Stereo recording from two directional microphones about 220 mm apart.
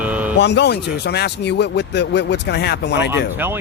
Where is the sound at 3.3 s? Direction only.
10° right (ahead or behind).